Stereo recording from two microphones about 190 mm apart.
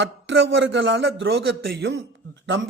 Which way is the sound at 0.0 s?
70° right (ahead or behind).